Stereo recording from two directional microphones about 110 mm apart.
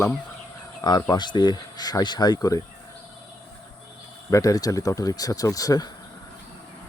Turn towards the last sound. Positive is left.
turn(degrees=35)  # may be behind; listen again after turning